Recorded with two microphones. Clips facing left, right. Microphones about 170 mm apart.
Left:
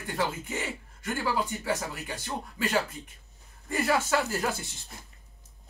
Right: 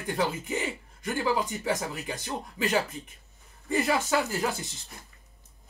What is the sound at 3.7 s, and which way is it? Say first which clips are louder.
Speech: right 1 dB; 15° right (ahead or behind).